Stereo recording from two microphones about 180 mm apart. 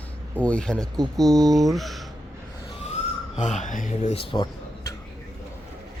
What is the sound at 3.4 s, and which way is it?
Speech, 40° left (ahead or behind).